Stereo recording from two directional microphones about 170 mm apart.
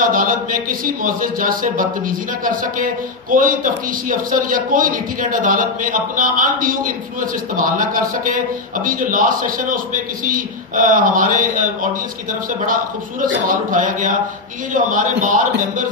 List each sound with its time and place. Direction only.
0.1 s speech: 55° right (ahead or behind)
13.2 s speech: 55° right (ahead or behind)